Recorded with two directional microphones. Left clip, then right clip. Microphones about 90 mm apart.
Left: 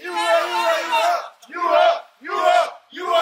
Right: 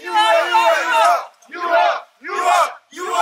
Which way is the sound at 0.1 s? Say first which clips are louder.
Right 5 dB; 40° right (ahead or behind).